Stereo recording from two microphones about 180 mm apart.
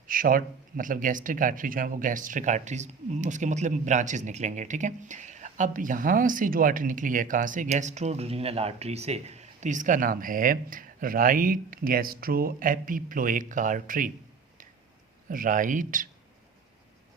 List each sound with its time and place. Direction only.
0.1 s speech: 50° right (ahead or behind)
15.3 s speech: 50° right (ahead or behind)